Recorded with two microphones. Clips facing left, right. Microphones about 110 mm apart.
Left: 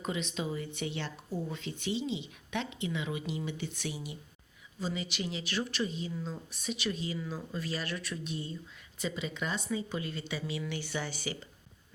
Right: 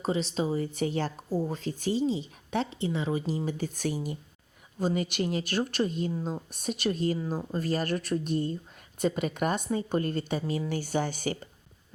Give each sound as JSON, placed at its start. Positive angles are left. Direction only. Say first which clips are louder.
{"t": 0.0, "sound": "speech", "louder": "right 7 dB", "side_deg": -35}